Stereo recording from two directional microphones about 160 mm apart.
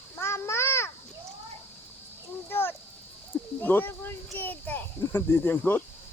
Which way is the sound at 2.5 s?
15° left (ahead or behind).